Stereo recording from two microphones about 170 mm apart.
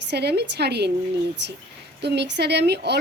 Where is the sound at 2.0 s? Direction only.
85° right.